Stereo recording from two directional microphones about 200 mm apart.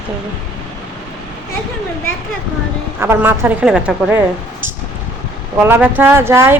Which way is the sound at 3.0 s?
10° right (ahead or behind).